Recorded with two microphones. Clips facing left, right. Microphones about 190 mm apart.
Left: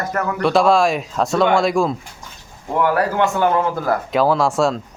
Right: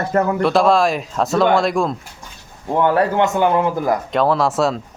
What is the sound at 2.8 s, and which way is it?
Speech, 25° right (ahead or behind).